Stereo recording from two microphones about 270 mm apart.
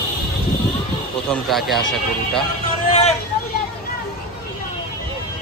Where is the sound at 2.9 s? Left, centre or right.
Left.